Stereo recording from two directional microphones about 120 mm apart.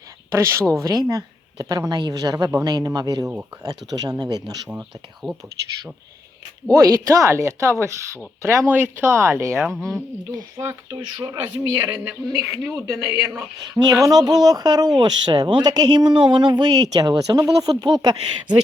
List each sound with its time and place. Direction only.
0.3 s a woman's voice: 25° right (ahead or behind)
4.7 s speech: 5° right (ahead or behind)
6.7 s a woman's voice: 30° right (ahead or behind)
9.6 s speech: centre (ahead or behind)
10.6 s a woman's voice: 20° right (ahead or behind)
11.2 s a woman's voice: 35° right (ahead or behind)
13.7 s speech: 35° right (ahead or behind)